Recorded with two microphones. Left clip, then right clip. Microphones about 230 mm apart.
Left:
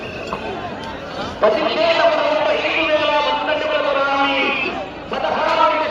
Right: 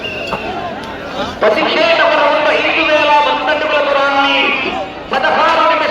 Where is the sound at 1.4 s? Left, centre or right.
Right.